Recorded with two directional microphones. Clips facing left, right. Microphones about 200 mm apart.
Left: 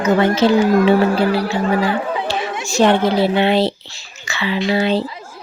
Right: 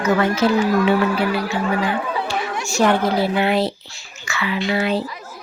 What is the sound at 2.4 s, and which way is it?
Chatter, 20° left (ahead or behind).